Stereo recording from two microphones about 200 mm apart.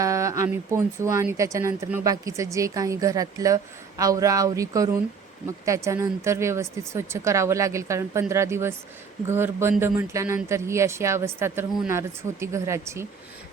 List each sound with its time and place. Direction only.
0.0 s speech: 15° right (ahead or behind)